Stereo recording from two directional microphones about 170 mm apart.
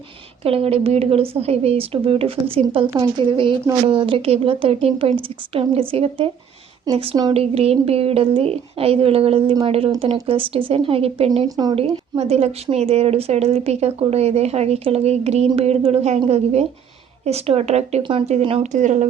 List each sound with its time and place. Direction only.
0.4 s a woman's voice: 35° right (ahead or behind)
11.4 s speech: 20° right (ahead or behind)
11.7 s a woman's voice: 35° right (ahead or behind)